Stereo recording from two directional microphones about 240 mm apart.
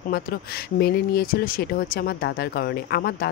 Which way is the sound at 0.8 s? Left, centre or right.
Left.